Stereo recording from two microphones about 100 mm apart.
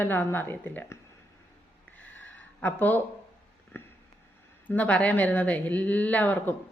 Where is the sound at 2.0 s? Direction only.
15° left (ahead or behind).